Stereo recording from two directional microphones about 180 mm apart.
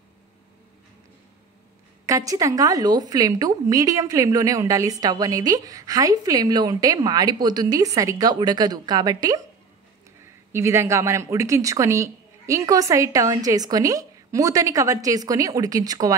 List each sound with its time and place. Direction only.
2.0 s a woman's voice: 20° right (ahead or behind)
10.5 s a woman's voice: 15° right (ahead or behind)